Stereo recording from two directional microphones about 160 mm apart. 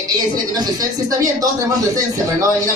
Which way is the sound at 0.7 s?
20° right (ahead or behind).